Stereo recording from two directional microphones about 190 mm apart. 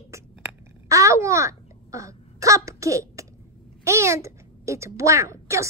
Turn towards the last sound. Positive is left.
turn(degrees=-15)  # may be behind; listen again after turning